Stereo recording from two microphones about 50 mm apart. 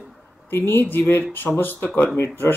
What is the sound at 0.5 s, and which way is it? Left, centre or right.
Speech, left.